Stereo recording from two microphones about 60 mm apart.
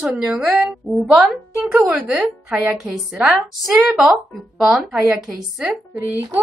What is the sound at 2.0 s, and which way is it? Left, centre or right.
A woman's voice, centre.